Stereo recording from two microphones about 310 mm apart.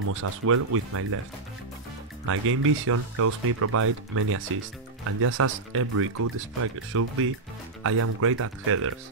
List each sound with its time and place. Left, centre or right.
0.1 s speech: right
2.2 s speech: right